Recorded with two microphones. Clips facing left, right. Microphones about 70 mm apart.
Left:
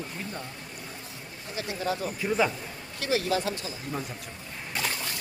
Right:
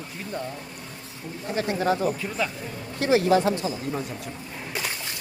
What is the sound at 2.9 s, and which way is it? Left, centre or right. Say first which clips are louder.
Speech: right 7 dB; right.